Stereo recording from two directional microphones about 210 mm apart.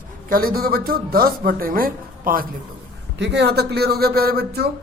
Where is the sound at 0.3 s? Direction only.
45° right (ahead or behind).